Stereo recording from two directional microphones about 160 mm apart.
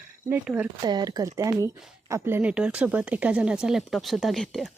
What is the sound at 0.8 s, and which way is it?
Speech, 25° right (ahead or behind).